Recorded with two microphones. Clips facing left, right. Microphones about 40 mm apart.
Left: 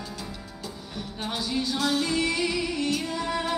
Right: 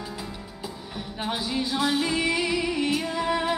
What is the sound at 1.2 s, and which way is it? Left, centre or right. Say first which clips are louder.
Music: right 1 dB; centre.